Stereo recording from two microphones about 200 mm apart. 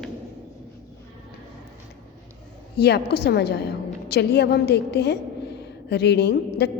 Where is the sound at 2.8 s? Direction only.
55° left (ahead or behind).